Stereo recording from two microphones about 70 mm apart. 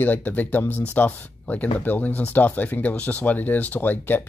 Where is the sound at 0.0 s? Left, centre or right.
Left.